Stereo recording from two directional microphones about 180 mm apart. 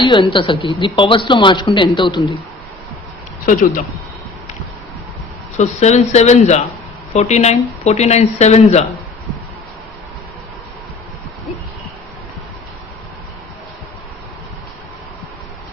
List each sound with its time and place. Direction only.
0.0 s speech: 25° left (ahead or behind)
3.4 s speech: 50° left (ahead or behind)
5.5 s speech: 40° left (ahead or behind)